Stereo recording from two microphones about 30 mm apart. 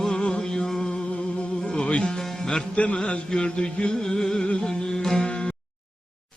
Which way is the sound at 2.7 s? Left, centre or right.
Left.